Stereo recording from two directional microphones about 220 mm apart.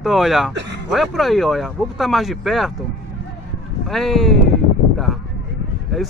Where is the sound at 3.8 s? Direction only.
Centre (ahead or behind).